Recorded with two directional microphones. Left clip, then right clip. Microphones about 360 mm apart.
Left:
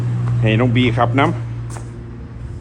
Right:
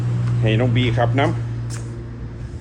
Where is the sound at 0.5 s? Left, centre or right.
Centre.